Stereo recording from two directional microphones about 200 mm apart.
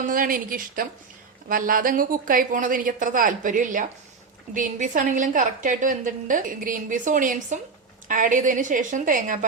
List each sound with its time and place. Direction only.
0.0 s a woman's voice: 45° right (ahead or behind)